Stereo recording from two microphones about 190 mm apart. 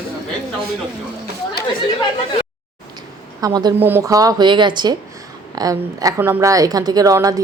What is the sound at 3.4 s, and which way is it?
A woman's voice, 20° right (ahead or behind).